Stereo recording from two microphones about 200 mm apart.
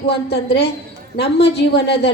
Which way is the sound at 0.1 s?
55° left (ahead or behind).